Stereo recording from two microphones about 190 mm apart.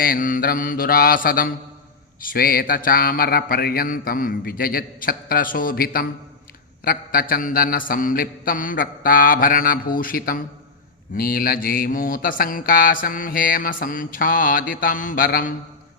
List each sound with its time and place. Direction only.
0.0 s mantra: 45° left (ahead or behind)